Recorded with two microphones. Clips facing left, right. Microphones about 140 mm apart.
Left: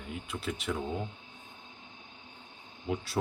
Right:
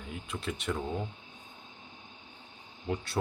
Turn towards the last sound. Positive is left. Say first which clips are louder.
# even
turn(degrees=5)  # may be behind; listen again after turning